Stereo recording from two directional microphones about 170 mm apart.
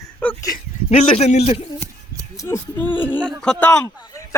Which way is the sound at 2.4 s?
15° left (ahead or behind).